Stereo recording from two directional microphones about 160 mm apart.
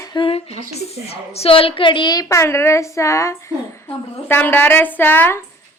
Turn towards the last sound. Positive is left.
turn(degrees=10)  # may be behind; listen again after turning